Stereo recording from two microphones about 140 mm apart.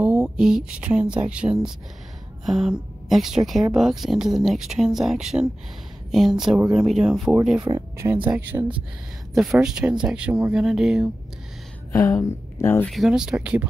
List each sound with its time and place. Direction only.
0.0 s speech: 10° right (ahead or behind)
7.7 s speech: 25° right (ahead or behind)
8.0 s speech: 15° right (ahead or behind)
9.3 s speech: centre (ahead or behind)
11.9 s speech: 20° left (ahead or behind)
12.9 s speech: 5° right (ahead or behind)